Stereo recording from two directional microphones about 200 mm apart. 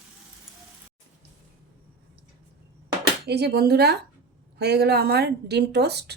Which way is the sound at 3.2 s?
55° right (ahead or behind).